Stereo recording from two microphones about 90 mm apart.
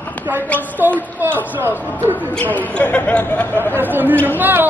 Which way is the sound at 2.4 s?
15° left (ahead or behind).